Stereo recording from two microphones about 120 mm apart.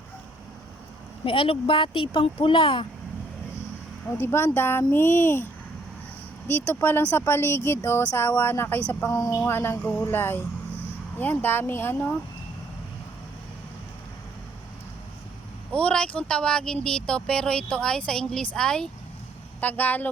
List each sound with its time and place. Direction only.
1.2 s speech: 45° left (ahead or behind)
4.2 s speech: 20° left (ahead or behind)
6.5 s speech: 20° left (ahead or behind)
15.7 s speech: 10° left (ahead or behind)